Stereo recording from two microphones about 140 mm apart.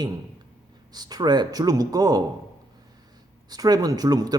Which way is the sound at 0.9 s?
30° right (ahead or behind).